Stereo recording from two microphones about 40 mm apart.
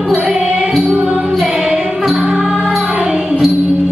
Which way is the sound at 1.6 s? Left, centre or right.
Centre.